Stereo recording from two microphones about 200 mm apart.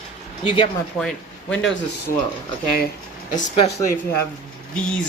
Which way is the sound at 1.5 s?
70° left (ahead or behind).